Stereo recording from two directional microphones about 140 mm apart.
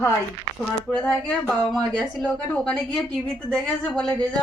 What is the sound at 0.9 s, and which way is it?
A woman's voice, 5° left (ahead or behind).